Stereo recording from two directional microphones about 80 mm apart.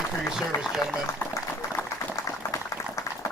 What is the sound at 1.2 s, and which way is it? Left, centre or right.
Applause, left.